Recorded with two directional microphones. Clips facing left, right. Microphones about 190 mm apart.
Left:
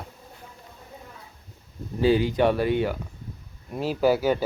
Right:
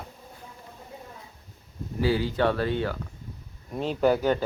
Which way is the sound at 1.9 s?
20° left (ahead or behind).